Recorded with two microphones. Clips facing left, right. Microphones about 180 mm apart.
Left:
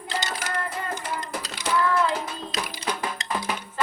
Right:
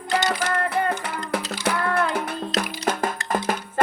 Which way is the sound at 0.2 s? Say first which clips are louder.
Right 7 dB; 70° right (ahead or behind).